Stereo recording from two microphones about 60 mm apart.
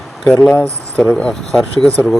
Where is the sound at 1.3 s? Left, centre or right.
Centre.